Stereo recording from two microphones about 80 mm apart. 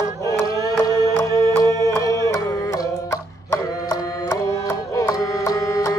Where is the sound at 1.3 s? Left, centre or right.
Left.